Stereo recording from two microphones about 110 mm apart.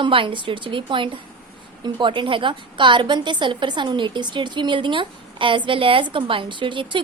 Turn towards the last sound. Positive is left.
turn(degrees=-50)  # may be behind; listen again after turning